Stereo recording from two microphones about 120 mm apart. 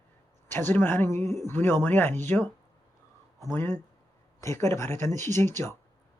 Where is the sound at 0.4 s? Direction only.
20° left (ahead or behind).